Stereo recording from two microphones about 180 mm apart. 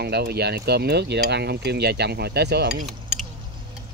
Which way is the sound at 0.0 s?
65° right (ahead or behind).